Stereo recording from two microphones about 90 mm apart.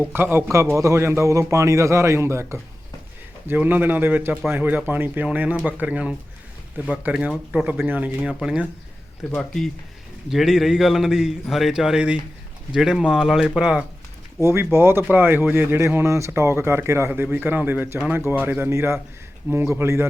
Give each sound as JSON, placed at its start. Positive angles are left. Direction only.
{"t": 0.0, "sound": "a man's voice", "side_deg": -25}
{"t": 9.3, "sound": "a man's voice", "side_deg": 5}
{"t": 14.4, "sound": "a man's voice", "side_deg": -30}